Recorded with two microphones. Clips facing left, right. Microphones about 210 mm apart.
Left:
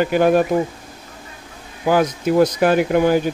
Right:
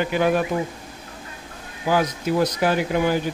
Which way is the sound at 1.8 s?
50° left (ahead or behind).